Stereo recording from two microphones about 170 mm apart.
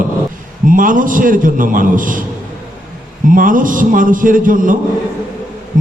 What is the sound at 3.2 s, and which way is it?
A man's voice, 55° right (ahead or behind).